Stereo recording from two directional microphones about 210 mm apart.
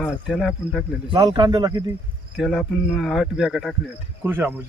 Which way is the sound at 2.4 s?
Centre (ahead or behind).